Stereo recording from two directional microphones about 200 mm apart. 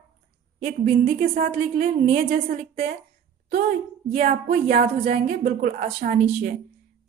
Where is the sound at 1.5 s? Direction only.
30° right (ahead or behind).